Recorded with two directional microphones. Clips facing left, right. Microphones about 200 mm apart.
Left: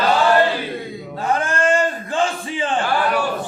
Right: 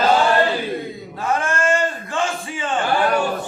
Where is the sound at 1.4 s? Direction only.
35° left (ahead or behind).